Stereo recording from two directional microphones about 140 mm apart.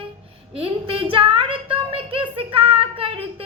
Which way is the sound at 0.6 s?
40° right (ahead or behind).